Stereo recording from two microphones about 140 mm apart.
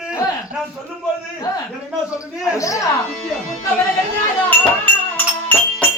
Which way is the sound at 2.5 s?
25° left (ahead or behind).